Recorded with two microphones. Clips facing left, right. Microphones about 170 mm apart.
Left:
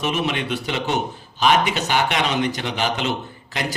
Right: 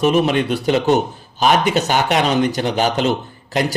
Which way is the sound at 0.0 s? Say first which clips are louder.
Right 8 dB; 40° right (ahead or behind).